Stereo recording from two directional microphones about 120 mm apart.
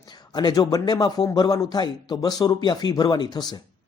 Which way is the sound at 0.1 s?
35° left (ahead or behind).